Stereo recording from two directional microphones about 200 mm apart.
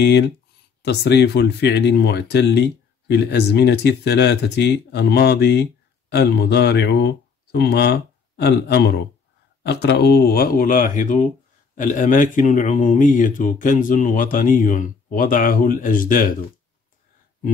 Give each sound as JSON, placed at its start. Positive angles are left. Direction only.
{"t": 0.8, "sound": "a man's voice", "side_deg": 55}